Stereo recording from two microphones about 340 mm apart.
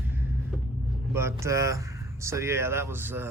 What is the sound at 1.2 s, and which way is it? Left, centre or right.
Speech, centre.